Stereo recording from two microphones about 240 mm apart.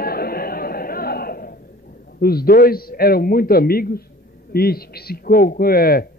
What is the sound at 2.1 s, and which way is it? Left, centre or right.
A man's voice, left.